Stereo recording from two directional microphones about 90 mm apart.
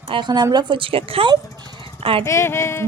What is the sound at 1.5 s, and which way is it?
Vehicle, 50° right (ahead or behind).